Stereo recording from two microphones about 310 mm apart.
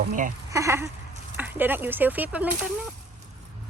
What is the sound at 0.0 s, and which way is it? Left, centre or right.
Speech, right.